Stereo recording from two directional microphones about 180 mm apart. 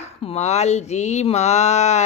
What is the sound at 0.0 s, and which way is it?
A woman's voice, 35° left (ahead or behind).